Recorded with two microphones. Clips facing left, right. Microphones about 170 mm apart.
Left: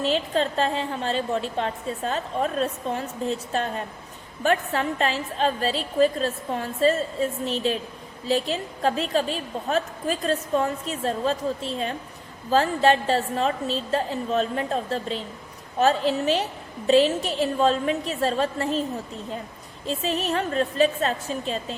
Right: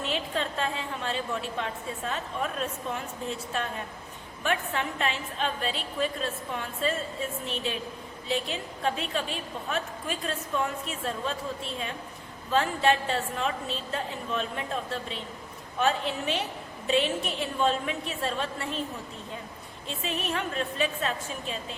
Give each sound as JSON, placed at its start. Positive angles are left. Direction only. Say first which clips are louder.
{"t": 0.0, "sound": "a woman's voice", "louder": "left 7 dB", "side_deg": 35}
{"t": 19.9, "sound": "a woman's voice", "louder": "left 6 dB", "side_deg": 35}